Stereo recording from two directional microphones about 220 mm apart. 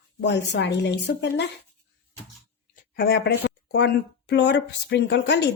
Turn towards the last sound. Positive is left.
turn(degrees=50)  # may be behind; listen again after turning